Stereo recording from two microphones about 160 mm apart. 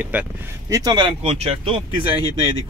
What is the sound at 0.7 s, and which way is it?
Speech, 25° right (ahead or behind).